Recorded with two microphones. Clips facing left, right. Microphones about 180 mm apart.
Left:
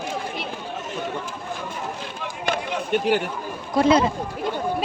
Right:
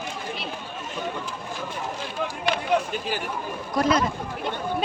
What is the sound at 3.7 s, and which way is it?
Speech, 30° left (ahead or behind).